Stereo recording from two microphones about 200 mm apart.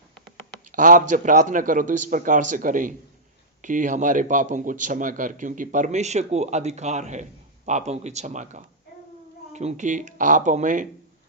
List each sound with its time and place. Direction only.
0.7 s a man's voice: 40° right (ahead or behind)